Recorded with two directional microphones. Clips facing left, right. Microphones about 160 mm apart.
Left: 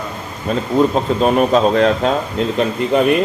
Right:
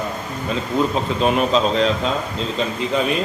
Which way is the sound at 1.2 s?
40° left (ahead or behind).